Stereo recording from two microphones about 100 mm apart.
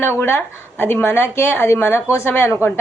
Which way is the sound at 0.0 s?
25° left (ahead or behind).